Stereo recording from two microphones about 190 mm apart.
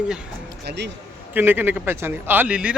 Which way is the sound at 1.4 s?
10° right (ahead or behind).